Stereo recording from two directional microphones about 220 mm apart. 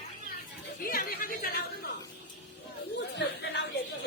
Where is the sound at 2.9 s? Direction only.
50° left (ahead or behind).